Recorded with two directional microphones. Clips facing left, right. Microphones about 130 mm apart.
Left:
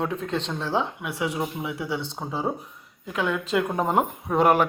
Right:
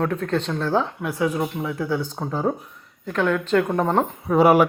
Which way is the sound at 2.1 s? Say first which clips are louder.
Right 4 dB; 5° left (ahead or behind).